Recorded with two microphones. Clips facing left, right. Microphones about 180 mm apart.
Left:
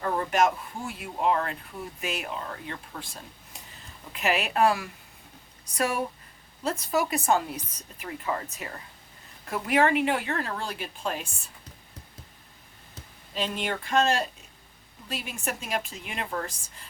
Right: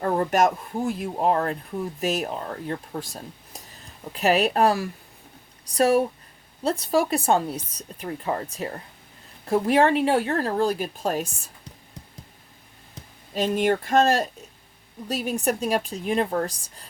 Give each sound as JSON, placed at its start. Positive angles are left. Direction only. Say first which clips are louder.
{"t": 0.0, "sound": "speech", "louder": "right 4 dB", "side_deg": -45}
{"t": 13.3, "sound": "speech", "louder": "right 9 dB", "side_deg": -45}